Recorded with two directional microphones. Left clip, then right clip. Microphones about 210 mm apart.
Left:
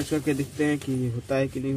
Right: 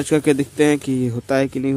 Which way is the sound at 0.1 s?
55° right (ahead or behind).